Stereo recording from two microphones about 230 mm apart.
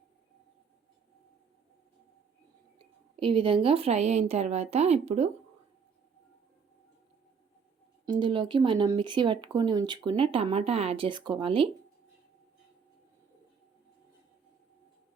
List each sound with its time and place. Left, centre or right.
3.2 s speech: right
8.0 s speech: centre